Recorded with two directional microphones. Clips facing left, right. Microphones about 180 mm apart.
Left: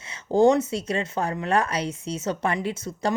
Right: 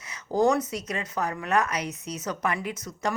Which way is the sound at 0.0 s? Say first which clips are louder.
Left 5 dB; 25° left (ahead or behind).